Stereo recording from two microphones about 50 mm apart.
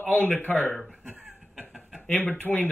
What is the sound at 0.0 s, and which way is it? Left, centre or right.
Speech, left.